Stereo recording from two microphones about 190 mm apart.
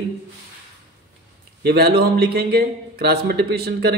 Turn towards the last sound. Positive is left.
turn(degrees=-55)  # may be behind; listen again after turning